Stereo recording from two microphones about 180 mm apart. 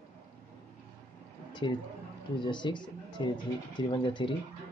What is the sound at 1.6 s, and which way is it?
Speech, 25° left (ahead or behind).